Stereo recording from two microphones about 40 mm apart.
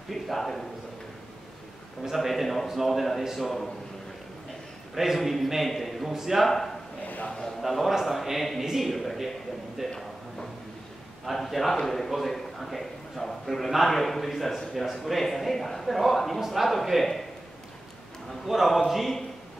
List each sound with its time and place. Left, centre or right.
0.1 s a man's voice: centre
2.1 s a man's voice: centre
4.9 s a man's voice: centre
6.1 s speech: centre
6.4 s a man's voice: centre
11.3 s a man's voice: centre
18.4 s a man's voice: centre